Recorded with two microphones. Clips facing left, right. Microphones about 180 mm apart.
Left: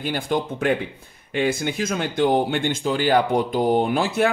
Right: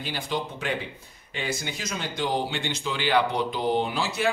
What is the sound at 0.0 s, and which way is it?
Speech, 50° left (ahead or behind).